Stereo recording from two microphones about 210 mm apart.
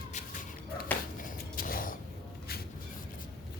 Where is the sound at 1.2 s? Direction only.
40° left (ahead or behind).